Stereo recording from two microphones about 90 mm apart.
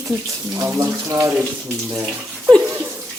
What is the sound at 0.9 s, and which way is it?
Speech, 25° right (ahead or behind).